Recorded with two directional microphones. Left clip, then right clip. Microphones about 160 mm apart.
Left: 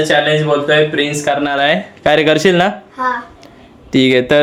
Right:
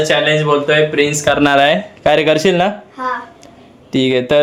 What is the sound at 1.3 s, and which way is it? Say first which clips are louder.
Speech: right 1 dB; 50° right (ahead or behind).